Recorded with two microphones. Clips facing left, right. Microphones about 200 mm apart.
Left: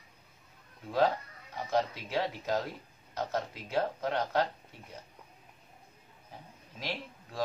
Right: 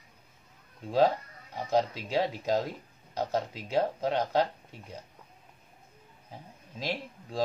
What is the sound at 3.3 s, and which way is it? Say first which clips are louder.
Speech: right 3 dB; 15° right (ahead or behind).